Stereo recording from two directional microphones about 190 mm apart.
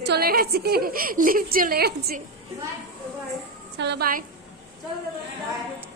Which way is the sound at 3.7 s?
60° right (ahead or behind).